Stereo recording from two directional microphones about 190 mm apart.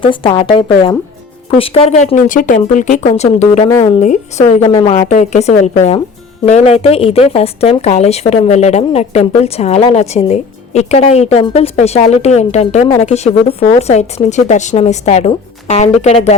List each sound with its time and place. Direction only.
0.0 s a woman's voice: 25° left (ahead or behind)
3.7 s speech: 15° left (ahead or behind)
4.0 s speech: 40° left (ahead or behind)